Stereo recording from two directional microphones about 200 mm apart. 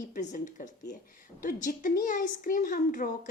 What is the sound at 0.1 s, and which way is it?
A woman's voice, 40° left (ahead or behind).